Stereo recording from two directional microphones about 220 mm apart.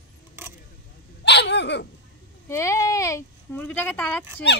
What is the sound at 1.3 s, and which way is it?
Dog, 50° left (ahead or behind).